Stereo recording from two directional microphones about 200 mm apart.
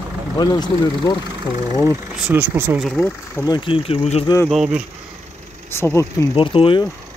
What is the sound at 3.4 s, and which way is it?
Speech, 25° left (ahead or behind).